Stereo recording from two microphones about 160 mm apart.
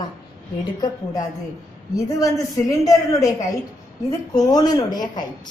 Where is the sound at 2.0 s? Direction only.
20° left (ahead or behind).